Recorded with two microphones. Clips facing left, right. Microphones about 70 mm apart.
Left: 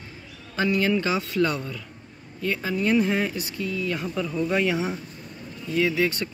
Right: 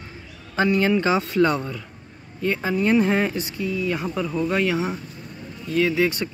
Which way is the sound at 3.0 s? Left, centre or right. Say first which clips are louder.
Right 4 dB; right.